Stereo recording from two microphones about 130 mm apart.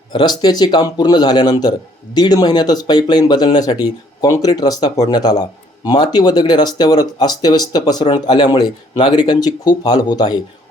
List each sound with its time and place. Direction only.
0.1 s speech: 35° left (ahead or behind)